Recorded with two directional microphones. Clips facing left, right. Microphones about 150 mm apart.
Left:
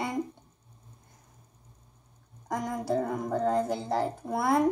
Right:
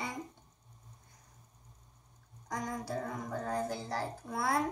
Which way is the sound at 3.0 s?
60° left (ahead or behind).